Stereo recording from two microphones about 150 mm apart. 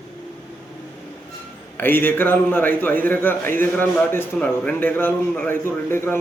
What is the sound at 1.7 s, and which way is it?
A man's voice, 15° left (ahead or behind).